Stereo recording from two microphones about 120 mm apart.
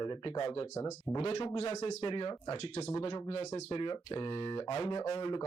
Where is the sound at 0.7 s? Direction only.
20° left (ahead or behind).